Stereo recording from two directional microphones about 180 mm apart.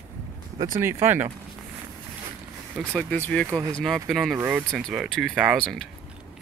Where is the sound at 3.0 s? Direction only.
5° left (ahead or behind).